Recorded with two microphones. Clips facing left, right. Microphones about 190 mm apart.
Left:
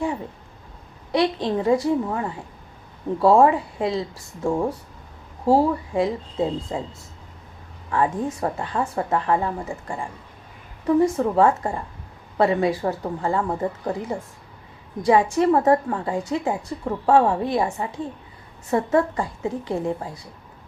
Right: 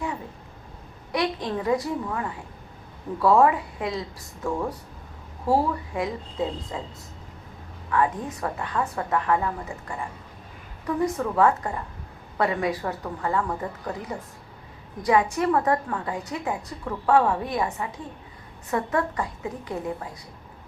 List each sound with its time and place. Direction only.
1.1 s a woman's voice: 30° left (ahead or behind)
7.9 s a woman's voice: 30° left (ahead or behind)